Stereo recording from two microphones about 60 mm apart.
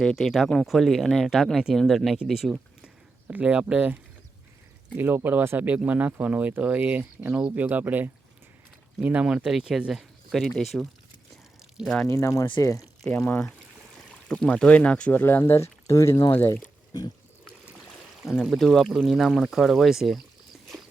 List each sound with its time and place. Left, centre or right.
0.0 s speech: centre
2.8 s a sound: centre
4.9 s speech: right
5.6 s speech: right; by 10.8 s centre
12.0 s speech: left
13.1 s speech: left
14.3 s speech: centre
15.1 s speech: left
15.5 s speech: left
18.4 s speech: centre